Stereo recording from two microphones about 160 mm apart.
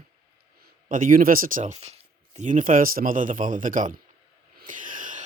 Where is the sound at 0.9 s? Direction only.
55° right (ahead or behind).